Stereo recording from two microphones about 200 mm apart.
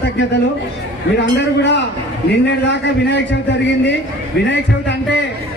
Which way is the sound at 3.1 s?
60° left (ahead or behind).